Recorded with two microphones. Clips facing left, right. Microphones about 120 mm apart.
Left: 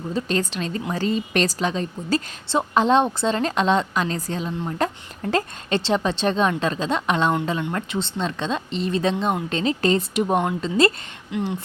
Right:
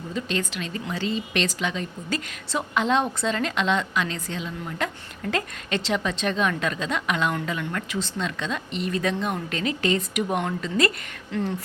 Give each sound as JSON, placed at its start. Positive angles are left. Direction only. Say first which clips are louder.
{"t": 0.1, "sound": "a woman's voice", "louder": "left 4 dB", "side_deg": 35}
{"t": 11.3, "sound": "speech", "louder": "left 1 dB", "side_deg": 15}